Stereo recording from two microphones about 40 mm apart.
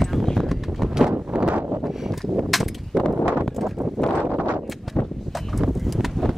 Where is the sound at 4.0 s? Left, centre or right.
Centre.